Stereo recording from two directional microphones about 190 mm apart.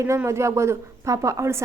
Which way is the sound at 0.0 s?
15° right (ahead or behind).